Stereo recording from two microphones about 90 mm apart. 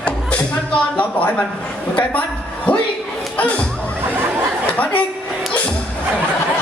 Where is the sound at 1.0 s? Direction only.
15° left (ahead or behind).